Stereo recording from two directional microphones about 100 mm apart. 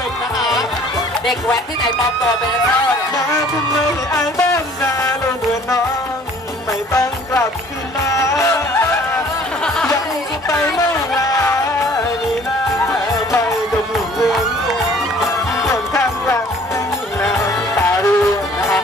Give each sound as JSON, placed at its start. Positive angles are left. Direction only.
{"t": 0.4, "sound": "music", "side_deg": 0}
{"t": 6.9, "sound": "music", "side_deg": 25}
{"t": 11.2, "sound": "music", "side_deg": 30}
{"t": 13.9, "sound": "music", "side_deg": 0}
{"t": 15.7, "sound": "music", "side_deg": 30}
{"t": 17.4, "sound": "music", "side_deg": 25}